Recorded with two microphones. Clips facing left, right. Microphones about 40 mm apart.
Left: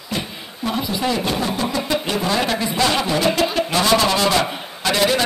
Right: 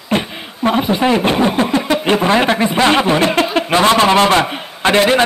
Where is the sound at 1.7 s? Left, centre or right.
Right.